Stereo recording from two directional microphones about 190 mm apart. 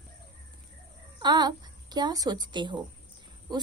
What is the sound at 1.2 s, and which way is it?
A woman's voice, 20° right (ahead or behind).